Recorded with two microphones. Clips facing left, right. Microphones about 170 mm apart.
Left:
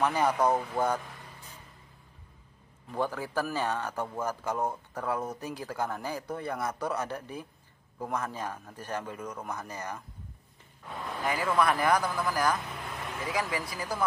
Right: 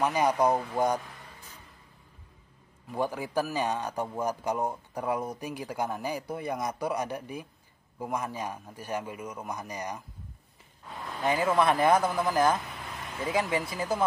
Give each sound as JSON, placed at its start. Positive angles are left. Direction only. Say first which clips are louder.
{"t": 0.0, "sound": "speech", "louder": "right 1 dB", "side_deg": -15}
{"t": 2.9, "sound": "speech", "louder": "right 1 dB", "side_deg": -15}
{"t": 11.2, "sound": "speech", "louder": "right 3 dB", "side_deg": -25}